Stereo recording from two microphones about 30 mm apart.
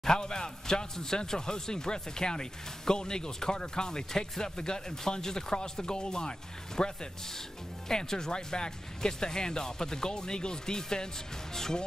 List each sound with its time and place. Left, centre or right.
0.0 s speech: left